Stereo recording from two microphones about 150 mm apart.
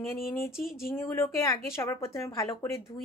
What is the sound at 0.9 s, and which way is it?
A woman's voice, 15° left (ahead or behind).